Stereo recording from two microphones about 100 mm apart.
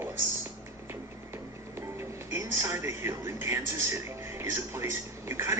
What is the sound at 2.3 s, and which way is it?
A man's voice, 30° right (ahead or behind).